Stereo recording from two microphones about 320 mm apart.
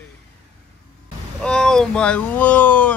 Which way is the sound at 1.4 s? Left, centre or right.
Centre.